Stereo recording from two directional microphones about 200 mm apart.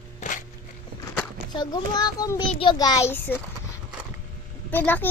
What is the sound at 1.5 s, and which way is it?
A child's voice, 20° left (ahead or behind).